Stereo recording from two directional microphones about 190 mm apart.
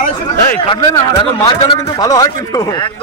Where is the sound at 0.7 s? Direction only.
20° left (ahead or behind).